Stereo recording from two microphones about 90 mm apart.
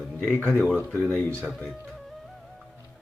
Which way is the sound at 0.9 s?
Centre (ahead or behind).